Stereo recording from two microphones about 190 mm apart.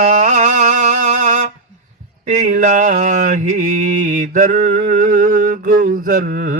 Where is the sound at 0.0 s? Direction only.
40° right (ahead or behind).